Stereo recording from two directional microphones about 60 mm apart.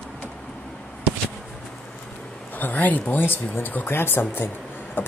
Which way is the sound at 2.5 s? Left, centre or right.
Left.